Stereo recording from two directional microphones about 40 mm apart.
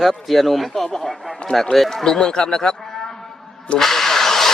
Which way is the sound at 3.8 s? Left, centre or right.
Centre.